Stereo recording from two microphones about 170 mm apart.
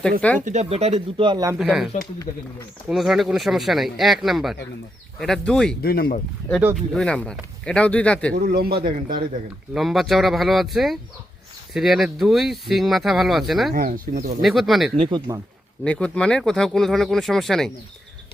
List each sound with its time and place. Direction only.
0.3 s speech: 45° right (ahead or behind); by 1.5 s 25° right (ahead or behind)
1.5 s speech: centre (ahead or behind)
5.8 s speech: 65° left (ahead or behind)
6.7 s speech: 5° left (ahead or behind)
8.3 s a man's voice: 60° right (ahead or behind)
9.7 s speech: centre (ahead or behind)
13.7 s a man's voice: 55° right (ahead or behind)
14.4 s speech: centre (ahead or behind)
14.9 s speech: 30° right (ahead or behind)
15.8 s speech: 5° left (ahead or behind)